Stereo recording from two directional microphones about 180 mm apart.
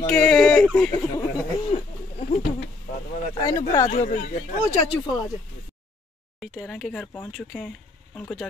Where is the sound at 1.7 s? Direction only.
35° left (ahead or behind).